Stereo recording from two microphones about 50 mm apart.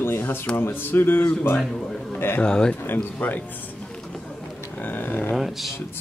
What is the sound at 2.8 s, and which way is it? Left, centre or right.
Speech, left.